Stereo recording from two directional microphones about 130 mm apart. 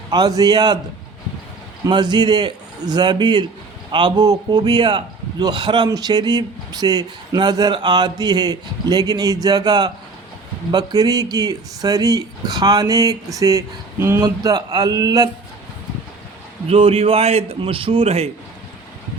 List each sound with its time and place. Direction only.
0.1 s a man's voice: 30° right (ahead or behind)
1.9 s a man's voice: 35° right (ahead or behind)
16.6 s a man's voice: 45° right (ahead or behind)